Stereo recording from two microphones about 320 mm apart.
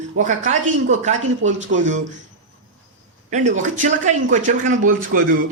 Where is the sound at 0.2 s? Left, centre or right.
Right.